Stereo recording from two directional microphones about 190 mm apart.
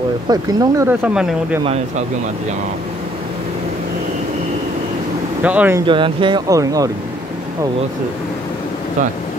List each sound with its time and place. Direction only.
0.3 s speech: 15° right (ahead or behind)
1.6 s speech: 30° right (ahead or behind)
5.4 s speech: 10° right (ahead or behind)
5.9 s speech: 25° right (ahead or behind)